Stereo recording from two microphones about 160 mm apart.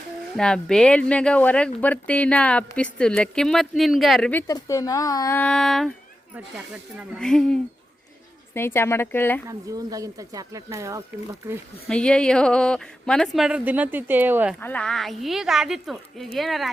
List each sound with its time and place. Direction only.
0.3 s a woman's voice: 5° left (ahead or behind)
4.4 s speech: 20° left (ahead or behind)
5.4 s speech: 5° left (ahead or behind)
7.2 s speech: 5° left (ahead or behind)
8.5 s a woman's voice: 15° left (ahead or behind)
9.5 s speech: 20° right (ahead or behind)
11.9 s speech: 5° left (ahead or behind); by 14.5 s 10° right (ahead or behind)
14.6 s speech: 10° left (ahead or behind)